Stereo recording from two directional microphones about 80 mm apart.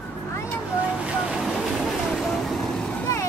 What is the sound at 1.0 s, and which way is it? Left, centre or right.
Vehicle, centre.